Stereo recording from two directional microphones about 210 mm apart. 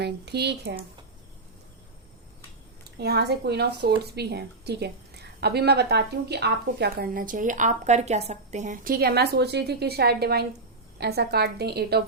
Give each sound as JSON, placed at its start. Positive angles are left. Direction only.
{"t": 0.0, "sound": "a woman's voice", "side_deg": -55}
{"t": 3.0, "sound": "a woman's voice", "side_deg": -50}